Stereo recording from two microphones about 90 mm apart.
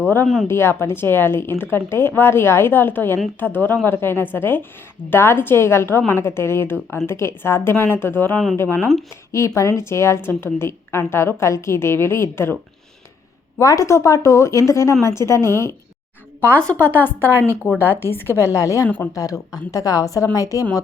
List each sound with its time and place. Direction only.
0.4 s a woman's voice: 30° left (ahead or behind)
8.8 s speech: centre (ahead or behind)
9.3 s a woman's voice: 35° left (ahead or behind)
13.6 s a woman's voice: 35° left (ahead or behind)
16.6 s a woman's voice: 10° left (ahead or behind)
17.3 s speech: 25° right (ahead or behind)
17.7 s a woman's voice: 25° left (ahead or behind)